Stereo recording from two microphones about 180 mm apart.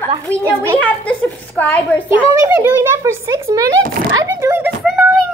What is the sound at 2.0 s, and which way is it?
A child's voice, 15° right (ahead or behind).